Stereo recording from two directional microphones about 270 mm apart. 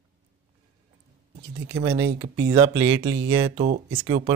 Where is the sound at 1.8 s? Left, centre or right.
Centre.